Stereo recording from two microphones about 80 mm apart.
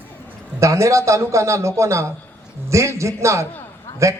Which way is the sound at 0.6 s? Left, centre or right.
Right.